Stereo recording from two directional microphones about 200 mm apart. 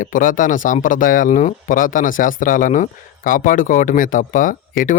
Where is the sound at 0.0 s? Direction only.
40° left (ahead or behind).